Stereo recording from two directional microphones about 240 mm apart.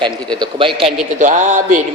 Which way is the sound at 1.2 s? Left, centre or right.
Right.